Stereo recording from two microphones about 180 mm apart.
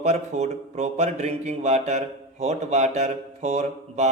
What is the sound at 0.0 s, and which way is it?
Speech, 35° right (ahead or behind).